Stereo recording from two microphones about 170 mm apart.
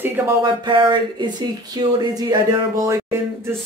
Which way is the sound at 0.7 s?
30° right (ahead or behind).